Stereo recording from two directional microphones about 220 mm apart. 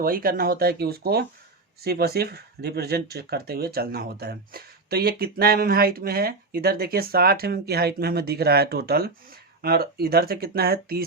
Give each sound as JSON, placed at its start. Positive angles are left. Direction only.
{"t": 0.0, "sound": "speech", "side_deg": -40}